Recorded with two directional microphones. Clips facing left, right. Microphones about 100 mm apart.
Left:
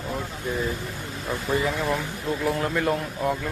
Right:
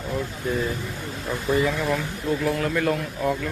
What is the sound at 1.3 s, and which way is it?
Speech, 20° left (ahead or behind).